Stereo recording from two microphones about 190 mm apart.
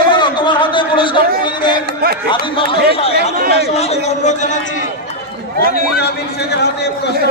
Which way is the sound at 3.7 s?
35° left (ahead or behind).